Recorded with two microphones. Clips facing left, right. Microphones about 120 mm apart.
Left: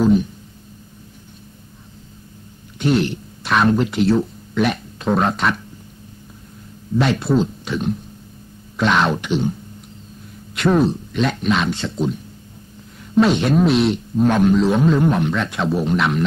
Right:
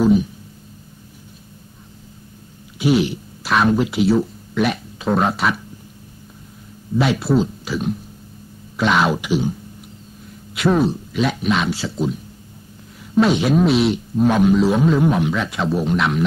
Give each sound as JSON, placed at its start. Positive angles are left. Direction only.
{"t": 0.0, "sound": "a sound", "side_deg": -5}
{"t": 2.8, "sound": "speech", "side_deg": -5}
{"t": 7.0, "sound": "a man's voice", "side_deg": -5}